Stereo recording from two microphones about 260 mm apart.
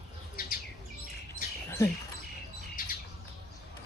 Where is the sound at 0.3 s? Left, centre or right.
Left.